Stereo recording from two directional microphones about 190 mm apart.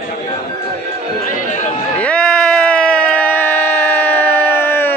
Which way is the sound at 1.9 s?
5° left (ahead or behind).